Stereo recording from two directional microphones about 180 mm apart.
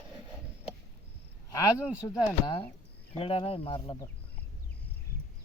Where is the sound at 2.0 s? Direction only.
25° left (ahead or behind).